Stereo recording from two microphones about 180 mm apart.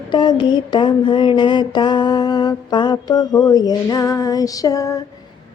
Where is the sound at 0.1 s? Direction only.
25° left (ahead or behind).